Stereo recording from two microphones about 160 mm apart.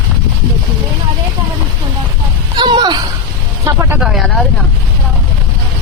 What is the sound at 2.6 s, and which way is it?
Speech, 25° right (ahead or behind).